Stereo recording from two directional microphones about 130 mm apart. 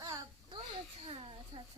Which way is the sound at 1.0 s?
45° right (ahead or behind).